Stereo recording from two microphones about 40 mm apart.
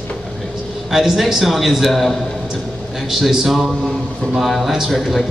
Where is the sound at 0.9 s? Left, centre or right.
Centre.